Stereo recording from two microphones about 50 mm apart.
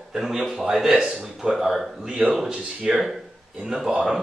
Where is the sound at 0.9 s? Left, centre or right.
Centre.